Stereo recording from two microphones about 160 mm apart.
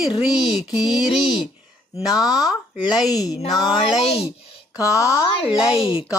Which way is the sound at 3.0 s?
Centre (ahead or behind).